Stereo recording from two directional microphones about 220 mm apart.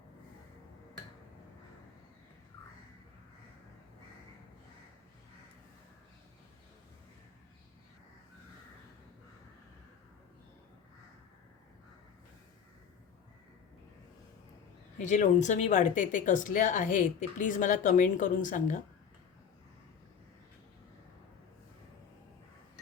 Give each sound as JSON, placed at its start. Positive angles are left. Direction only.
{"t": 14.9, "sound": "speech", "side_deg": 35}